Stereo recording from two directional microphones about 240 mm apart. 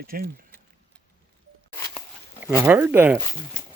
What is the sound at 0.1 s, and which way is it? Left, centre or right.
Speech, right.